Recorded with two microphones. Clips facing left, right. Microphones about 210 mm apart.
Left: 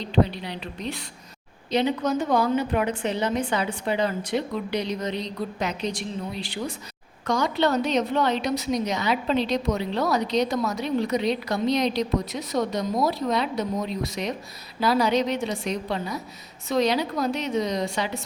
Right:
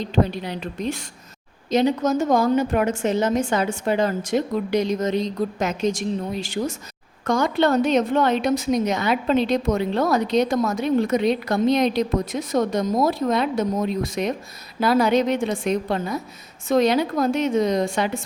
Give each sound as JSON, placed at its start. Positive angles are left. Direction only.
{"t": 0.0, "sound": "a woman's voice", "side_deg": -45}